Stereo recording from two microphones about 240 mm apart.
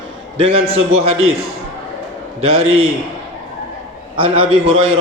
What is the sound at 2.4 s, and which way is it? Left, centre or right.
Speech, right.